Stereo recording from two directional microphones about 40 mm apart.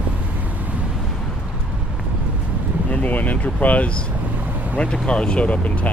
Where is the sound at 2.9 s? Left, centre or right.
Left.